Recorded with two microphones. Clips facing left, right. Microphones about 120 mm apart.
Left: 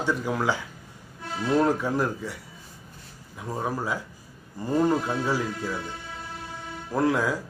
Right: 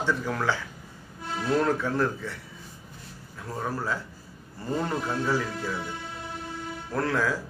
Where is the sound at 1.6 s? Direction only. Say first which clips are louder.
Left 3 dB; 15° left (ahead or behind).